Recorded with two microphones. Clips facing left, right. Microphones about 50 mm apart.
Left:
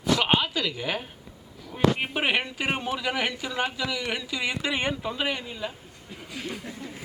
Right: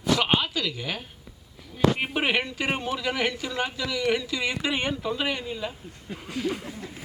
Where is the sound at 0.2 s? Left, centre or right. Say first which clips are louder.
Even; centre.